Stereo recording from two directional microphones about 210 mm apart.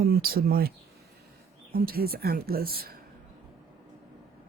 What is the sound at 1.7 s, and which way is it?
Speech, 45° right (ahead or behind).